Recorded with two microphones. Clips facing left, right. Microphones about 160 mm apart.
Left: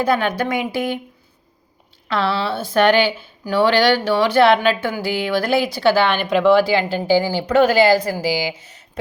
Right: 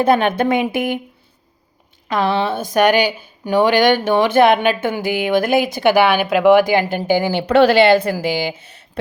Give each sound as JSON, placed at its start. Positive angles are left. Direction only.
{"t": 0.0, "sound": "speech", "side_deg": -25}
{"t": 2.0, "sound": "speech", "side_deg": -15}
{"t": 6.9, "sound": "speech", "side_deg": -60}